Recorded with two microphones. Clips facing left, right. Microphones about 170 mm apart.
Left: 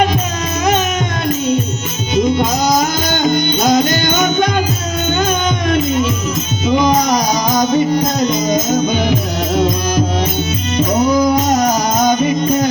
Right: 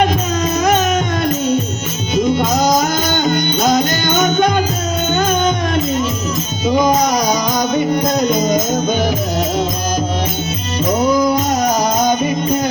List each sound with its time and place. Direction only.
3.6 s music: 45° right (ahead or behind)
6.7 s music: 45° right (ahead or behind)